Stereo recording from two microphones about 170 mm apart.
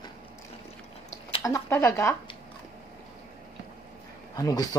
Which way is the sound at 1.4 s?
20° left (ahead or behind).